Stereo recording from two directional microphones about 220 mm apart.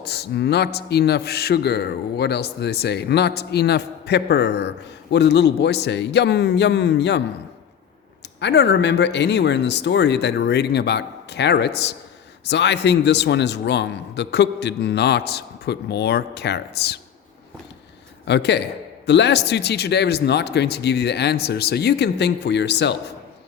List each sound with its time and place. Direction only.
0.0 s a man's voice: 50° left (ahead or behind)
8.4 s a man's voice: 50° left (ahead or behind)
18.3 s a man's voice: 50° left (ahead or behind)